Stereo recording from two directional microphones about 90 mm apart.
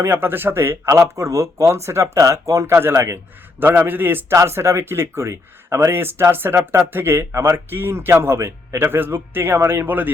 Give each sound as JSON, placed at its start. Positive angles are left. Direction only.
{"t": 0.0, "sound": "speech", "side_deg": -25}